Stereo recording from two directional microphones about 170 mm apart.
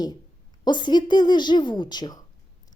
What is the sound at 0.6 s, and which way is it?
A woman's voice, 25° left (ahead or behind).